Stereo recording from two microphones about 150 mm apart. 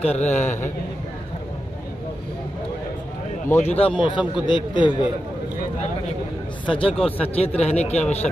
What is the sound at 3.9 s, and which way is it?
A man's voice, 30° left (ahead or behind).